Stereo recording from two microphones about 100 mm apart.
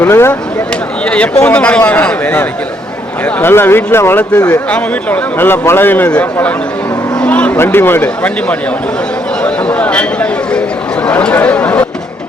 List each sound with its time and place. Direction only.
0.0 s speech: 25° left (ahead or behind)
1.0 s speech: 10° left (ahead or behind)
9.4 s a sound: 15° left (ahead or behind)
11.0 s chatter: 10° left (ahead or behind)